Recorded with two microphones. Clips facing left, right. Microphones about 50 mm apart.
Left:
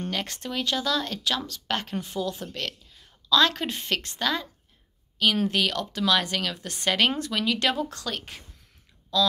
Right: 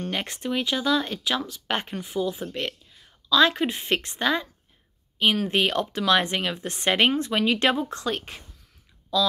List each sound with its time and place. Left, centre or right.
0.1 s speech: centre
5.5 s speech: right